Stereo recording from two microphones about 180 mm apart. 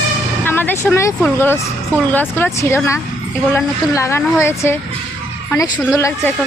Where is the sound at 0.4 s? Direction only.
10° left (ahead or behind).